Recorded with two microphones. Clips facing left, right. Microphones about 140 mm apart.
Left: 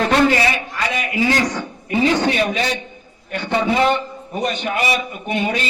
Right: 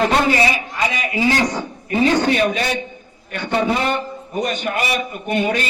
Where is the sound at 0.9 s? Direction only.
30° right (ahead or behind).